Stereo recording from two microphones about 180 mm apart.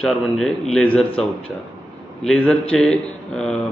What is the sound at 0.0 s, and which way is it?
Speech, 5° left (ahead or behind).